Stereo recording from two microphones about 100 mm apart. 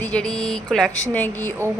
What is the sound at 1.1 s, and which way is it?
Speech, 20° left (ahead or behind).